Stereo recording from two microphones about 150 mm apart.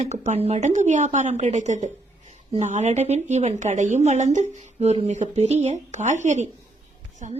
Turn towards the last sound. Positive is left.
turn(degrees=-55)  # may be behind; listen again after turning